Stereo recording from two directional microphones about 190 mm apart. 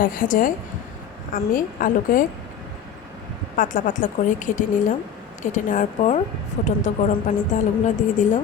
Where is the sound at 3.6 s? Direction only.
45° left (ahead or behind).